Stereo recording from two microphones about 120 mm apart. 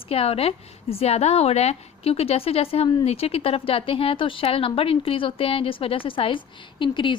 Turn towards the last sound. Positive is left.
turn(degrees=40)  # may be behind; listen again after turning